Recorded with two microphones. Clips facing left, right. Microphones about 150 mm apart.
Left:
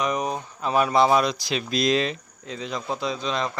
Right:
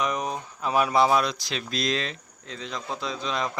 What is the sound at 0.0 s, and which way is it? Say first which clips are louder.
A man's voice: left 2 dB; centre (ahead or behind).